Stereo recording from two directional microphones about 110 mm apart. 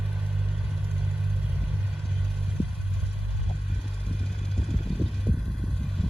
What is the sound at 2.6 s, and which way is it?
Vehicle, 15° right (ahead or behind).